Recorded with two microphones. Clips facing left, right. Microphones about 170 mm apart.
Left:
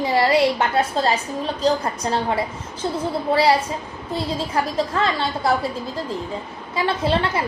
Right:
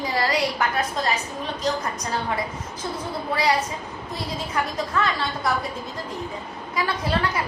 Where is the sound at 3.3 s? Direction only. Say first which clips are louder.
Left 5 dB; 30° left (ahead or behind).